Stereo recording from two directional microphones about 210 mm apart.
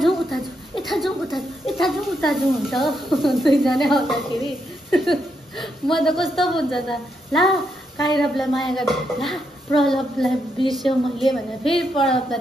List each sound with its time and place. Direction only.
0.0 s a woman's voice: centre (ahead or behind)